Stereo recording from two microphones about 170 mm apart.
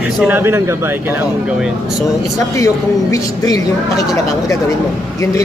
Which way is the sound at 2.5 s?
20° left (ahead or behind).